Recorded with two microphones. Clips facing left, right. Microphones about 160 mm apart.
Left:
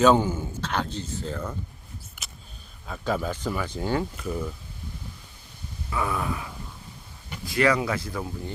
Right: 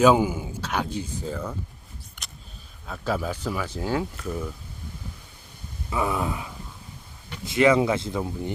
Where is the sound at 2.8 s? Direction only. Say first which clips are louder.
Even; centre (ahead or behind).